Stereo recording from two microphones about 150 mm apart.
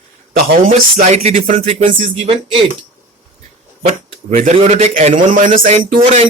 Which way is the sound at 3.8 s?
55° right (ahead or behind).